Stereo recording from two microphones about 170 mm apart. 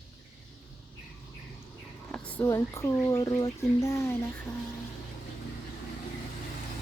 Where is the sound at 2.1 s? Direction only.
10° left (ahead or behind).